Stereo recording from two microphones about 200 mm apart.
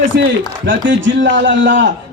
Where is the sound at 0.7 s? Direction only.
65° right (ahead or behind).